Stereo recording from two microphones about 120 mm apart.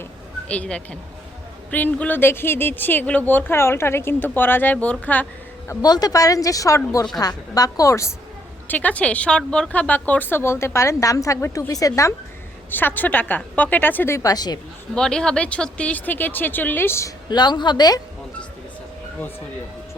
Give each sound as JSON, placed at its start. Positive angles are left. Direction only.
{"t": 0.4, "sound": "speech", "side_deg": 10}
{"t": 5.6, "sound": "speech", "side_deg": 35}
{"t": 8.6, "sound": "speech", "side_deg": 15}
{"t": 12.7, "sound": "speech", "side_deg": 15}
{"t": 14.9, "sound": "speech", "side_deg": 5}
{"t": 17.2, "sound": "speech", "side_deg": 35}